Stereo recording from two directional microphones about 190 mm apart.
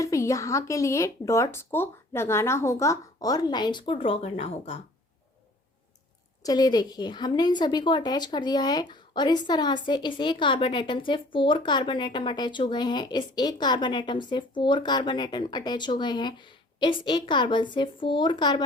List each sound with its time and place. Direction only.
0.0 s a woman's voice: 15° left (ahead or behind); by 4.8 s 30° left (ahead or behind)
6.4 s a woman's voice: 20° left (ahead or behind)